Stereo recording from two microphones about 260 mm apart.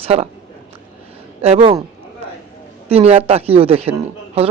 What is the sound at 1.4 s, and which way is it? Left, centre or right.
Speech, right.